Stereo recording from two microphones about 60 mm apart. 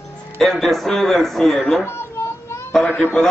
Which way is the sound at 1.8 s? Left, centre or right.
Left.